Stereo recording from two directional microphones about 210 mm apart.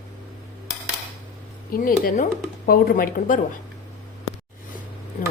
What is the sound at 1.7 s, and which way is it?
Speech, 40° left (ahead or behind).